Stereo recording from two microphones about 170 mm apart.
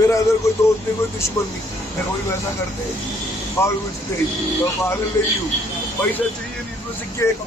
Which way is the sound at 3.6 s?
15° left (ahead or behind).